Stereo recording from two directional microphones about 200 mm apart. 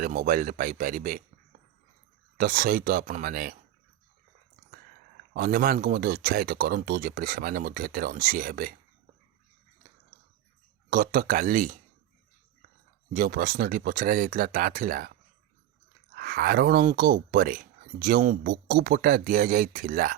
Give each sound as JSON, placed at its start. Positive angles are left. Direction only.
{"t": 0.0, "sound": "speech", "side_deg": -45}
{"t": 2.4, "sound": "speech", "side_deg": -45}
{"t": 5.3, "sound": "speech", "side_deg": -50}
{"t": 10.8, "sound": "speech", "side_deg": -45}
{"t": 13.1, "sound": "speech", "side_deg": -45}